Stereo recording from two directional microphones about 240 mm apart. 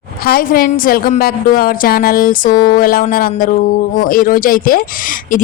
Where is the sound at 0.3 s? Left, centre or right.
Left.